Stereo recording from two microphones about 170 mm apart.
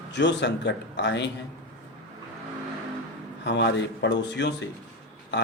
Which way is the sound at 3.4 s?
90° left.